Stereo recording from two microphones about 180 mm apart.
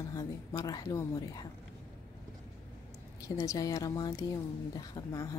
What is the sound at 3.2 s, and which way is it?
A woman's voice, 20° left (ahead or behind).